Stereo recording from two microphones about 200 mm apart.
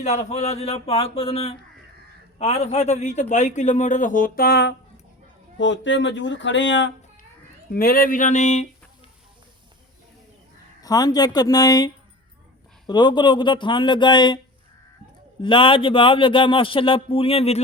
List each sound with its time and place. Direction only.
0.0 s a man's voice: 35° left (ahead or behind); by 4.7 s 50° left (ahead or behind)
5.5 s speech: 65° left (ahead or behind)
7.7 s speech: 45° left (ahead or behind)
10.8 s a man's voice: 20° left (ahead or behind)
12.9 s a man's voice: 20° left (ahead or behind)
15.4 s a man's voice: 25° left (ahead or behind)